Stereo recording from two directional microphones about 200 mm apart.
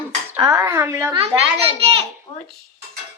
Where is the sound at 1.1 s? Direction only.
30° right (ahead or behind).